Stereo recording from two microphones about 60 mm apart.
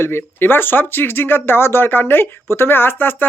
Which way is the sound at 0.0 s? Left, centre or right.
Left.